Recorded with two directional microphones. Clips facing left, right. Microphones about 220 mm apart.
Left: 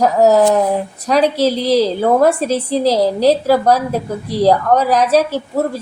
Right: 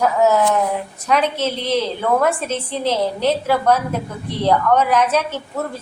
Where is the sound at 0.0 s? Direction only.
35° left (ahead or behind).